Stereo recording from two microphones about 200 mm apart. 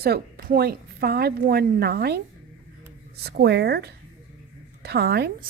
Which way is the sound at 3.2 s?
55° right (ahead or behind).